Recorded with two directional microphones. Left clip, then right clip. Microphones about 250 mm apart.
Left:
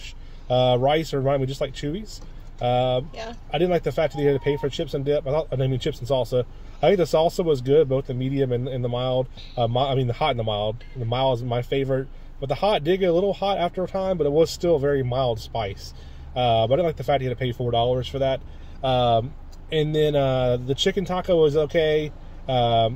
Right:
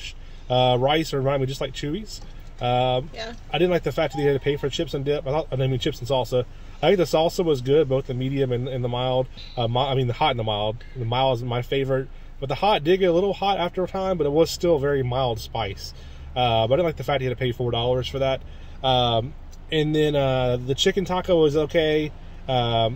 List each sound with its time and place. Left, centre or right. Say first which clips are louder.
0.7 s speech: even; centre
3.5 s speech: even; centre